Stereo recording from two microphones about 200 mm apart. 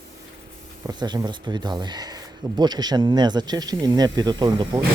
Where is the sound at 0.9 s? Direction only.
20° right (ahead or behind).